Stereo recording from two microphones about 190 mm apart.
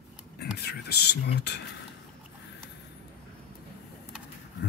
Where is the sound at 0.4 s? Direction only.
55° left (ahead or behind).